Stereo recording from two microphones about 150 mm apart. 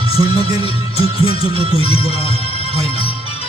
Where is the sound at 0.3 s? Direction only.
25° right (ahead or behind).